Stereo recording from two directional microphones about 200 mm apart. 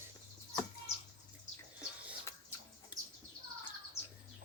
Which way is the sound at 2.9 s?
5° right (ahead or behind).